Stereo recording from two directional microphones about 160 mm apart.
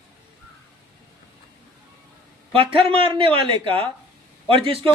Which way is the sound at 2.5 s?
35° right (ahead or behind).